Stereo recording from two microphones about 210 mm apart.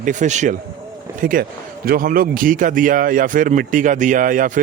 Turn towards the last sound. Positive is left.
turn(degrees=-40)  # may be behind; listen again after turning